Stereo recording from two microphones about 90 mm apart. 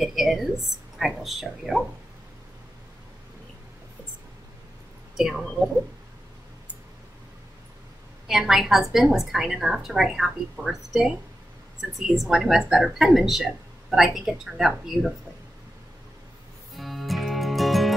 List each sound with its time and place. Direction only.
0.0 s a woman's voice: centre (ahead or behind)
5.1 s speech: 5° right (ahead or behind)
8.3 s a woman's voice: 5° right (ahead or behind)
16.7 s music: centre (ahead or behind)